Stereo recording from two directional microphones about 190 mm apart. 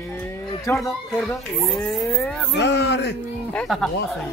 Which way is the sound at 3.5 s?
Centre (ahead or behind).